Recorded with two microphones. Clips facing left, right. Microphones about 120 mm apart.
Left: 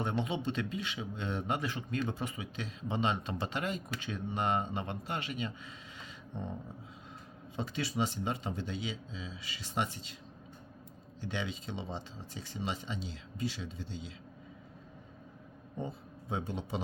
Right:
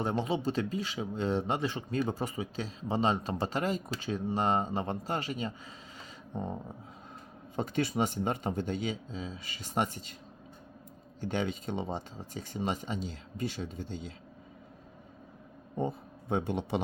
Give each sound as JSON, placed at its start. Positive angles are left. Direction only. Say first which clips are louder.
{"t": 0.0, "sound": "speech", "louder": "right 3 dB", "side_deg": -35}
{"t": 7.5, "sound": "speech", "louder": "right 5 dB", "side_deg": -50}
{"t": 11.2, "sound": "speech", "louder": "right 6 dB", "side_deg": -45}
{"t": 15.8, "sound": "speech", "louder": "right 7 dB", "side_deg": -55}